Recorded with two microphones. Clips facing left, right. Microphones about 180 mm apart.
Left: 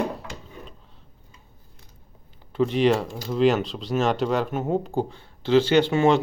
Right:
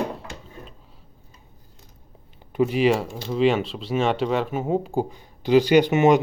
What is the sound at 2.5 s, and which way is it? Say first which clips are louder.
Speech: right 1 dB; 5° right (ahead or behind).